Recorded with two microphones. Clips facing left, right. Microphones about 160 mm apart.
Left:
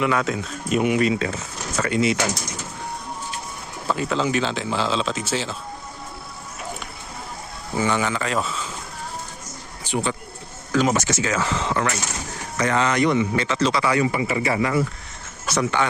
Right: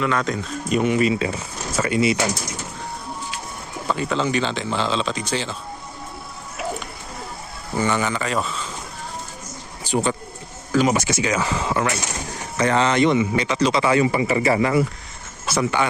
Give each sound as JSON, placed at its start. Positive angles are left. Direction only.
{"t": 0.0, "sound": "speech", "side_deg": 10}
{"t": 1.0, "sound": "speech", "side_deg": -5}
{"t": 3.8, "sound": "a man's voice", "side_deg": 0}
{"t": 7.8, "sound": "a man's voice", "side_deg": 0}
{"t": 9.8, "sound": "speech", "side_deg": -40}
{"t": 10.7, "sound": "speech", "side_deg": -10}
{"t": 12.5, "sound": "speech", "side_deg": -30}
{"t": 13.1, "sound": "speech", "side_deg": -15}
{"t": 13.8, "sound": "speech", "side_deg": -25}
{"t": 14.3, "sound": "speech", "side_deg": -35}
{"t": 15.4, "sound": "speech", "side_deg": -10}